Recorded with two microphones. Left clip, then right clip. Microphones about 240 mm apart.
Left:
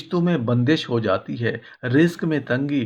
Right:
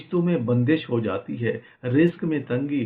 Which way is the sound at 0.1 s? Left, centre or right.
Left.